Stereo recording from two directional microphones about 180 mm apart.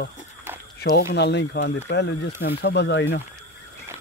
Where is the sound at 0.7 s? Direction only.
70° left (ahead or behind).